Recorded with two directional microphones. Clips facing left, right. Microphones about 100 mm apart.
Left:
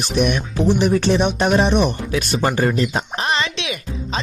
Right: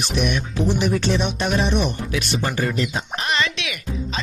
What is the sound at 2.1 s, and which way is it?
Speech, 40° left (ahead or behind).